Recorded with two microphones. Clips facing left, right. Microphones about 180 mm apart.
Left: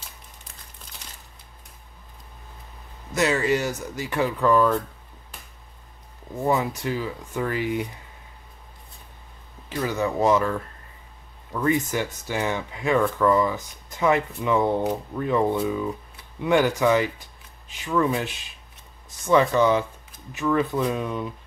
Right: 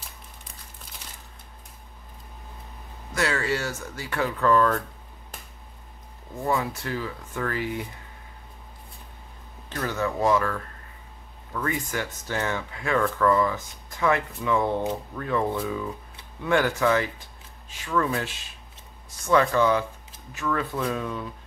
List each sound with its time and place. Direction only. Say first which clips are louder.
3.2 s speech: left 4 dB; 20° left (ahead or behind)
6.3 s speech: left 3 dB; 20° left (ahead or behind)
9.7 s speech: left 3 dB; 10° left (ahead or behind)